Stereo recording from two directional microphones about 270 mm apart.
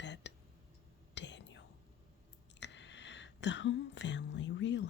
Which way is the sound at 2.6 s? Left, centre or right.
Left.